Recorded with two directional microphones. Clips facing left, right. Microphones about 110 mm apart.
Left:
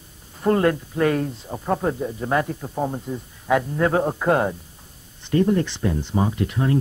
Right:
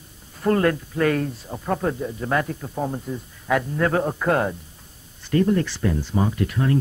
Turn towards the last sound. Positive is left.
turn(degrees=20)  # may be behind; listen again after turning